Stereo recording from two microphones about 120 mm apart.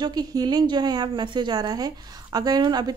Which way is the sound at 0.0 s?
35° right (ahead or behind).